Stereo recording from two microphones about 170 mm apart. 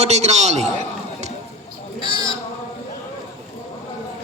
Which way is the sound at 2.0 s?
30° left (ahead or behind).